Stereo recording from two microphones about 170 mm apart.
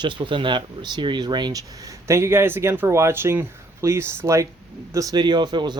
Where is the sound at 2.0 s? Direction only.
15° right (ahead or behind).